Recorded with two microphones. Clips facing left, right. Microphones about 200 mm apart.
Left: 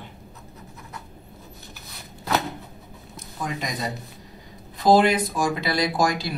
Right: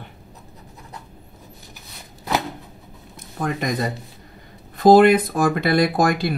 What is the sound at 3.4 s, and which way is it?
Speech, 55° right (ahead or behind).